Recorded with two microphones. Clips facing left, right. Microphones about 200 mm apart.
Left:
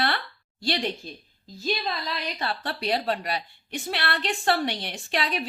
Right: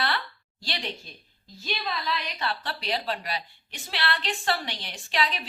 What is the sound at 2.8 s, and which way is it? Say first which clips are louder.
A woman's voice: left 4 dB; 55° left (ahead or behind).